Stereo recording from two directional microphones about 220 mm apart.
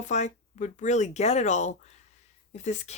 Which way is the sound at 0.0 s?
35° left (ahead or behind).